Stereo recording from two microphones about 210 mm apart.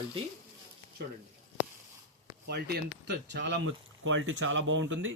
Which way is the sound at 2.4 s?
50° right (ahead or behind).